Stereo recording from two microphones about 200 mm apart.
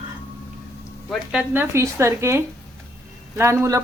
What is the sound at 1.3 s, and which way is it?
Speech, 10° right (ahead or behind).